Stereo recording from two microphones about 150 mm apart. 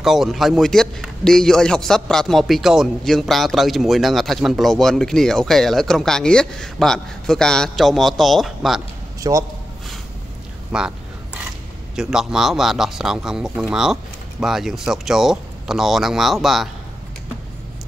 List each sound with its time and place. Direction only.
0.0 s a man's voice: centre (ahead or behind)
9.3 s a man's voice: 25° right (ahead or behind)
10.7 s a man's voice: 5° right (ahead or behind)
11.9 s a man's voice: 5° right (ahead or behind)